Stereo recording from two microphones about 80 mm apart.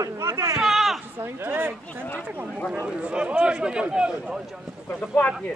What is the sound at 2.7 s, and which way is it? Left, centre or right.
A man's voice, centre.